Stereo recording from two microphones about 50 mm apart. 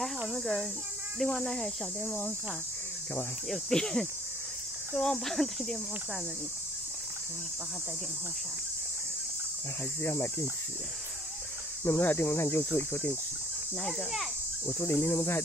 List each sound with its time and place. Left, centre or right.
0.3 s speech: centre
3.7 s speech: centre
10.0 s speech: left
11.8 s speech: left
12.1 s speech: left
13.7 s speech: centre
14.7 s speech: left